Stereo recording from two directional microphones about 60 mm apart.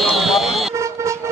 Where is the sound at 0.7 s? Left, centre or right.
Right.